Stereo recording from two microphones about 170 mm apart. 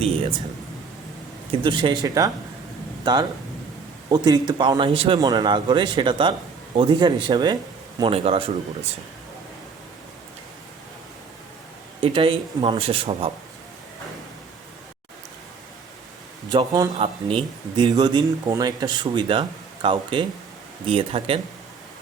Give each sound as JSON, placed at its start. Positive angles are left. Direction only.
{"t": 0.0, "sound": "speech", "side_deg": -35}
{"t": 1.5, "sound": "speech", "side_deg": -30}
{"t": 11.9, "sound": "speech", "side_deg": -30}
{"t": 16.5, "sound": "speech", "side_deg": -25}